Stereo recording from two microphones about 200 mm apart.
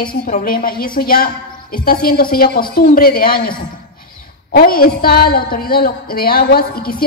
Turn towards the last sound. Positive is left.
turn(degrees=50)  # may be behind; listen again after turning